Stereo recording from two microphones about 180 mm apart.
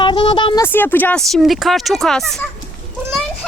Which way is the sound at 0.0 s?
25° left (ahead or behind).